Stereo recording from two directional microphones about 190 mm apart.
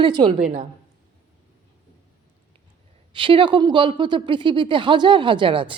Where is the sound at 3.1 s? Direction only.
25° right (ahead or behind).